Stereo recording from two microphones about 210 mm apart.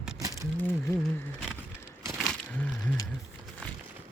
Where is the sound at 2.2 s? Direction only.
5° left (ahead or behind).